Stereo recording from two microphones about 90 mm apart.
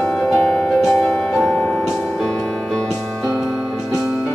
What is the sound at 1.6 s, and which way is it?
Music, 15° left (ahead or behind).